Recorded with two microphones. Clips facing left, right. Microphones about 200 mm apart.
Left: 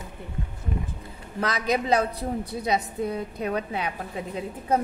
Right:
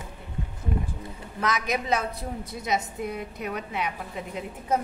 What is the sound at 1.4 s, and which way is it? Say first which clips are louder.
A woman's voice: left 2 dB; 30° left (ahead or behind).